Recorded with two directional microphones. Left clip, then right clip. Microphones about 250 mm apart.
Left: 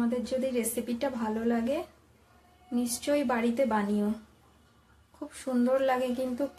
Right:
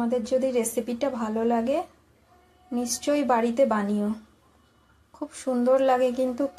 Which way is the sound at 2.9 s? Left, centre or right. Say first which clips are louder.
Right 6 dB; centre.